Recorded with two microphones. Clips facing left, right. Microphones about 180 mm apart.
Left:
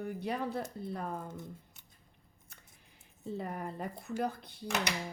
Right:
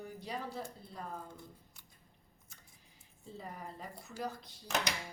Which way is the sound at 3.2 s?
65° left (ahead or behind).